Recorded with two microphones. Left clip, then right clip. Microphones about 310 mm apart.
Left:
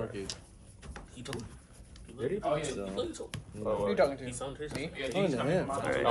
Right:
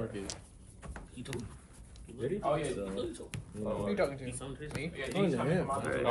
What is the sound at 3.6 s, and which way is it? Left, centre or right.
Speech, left.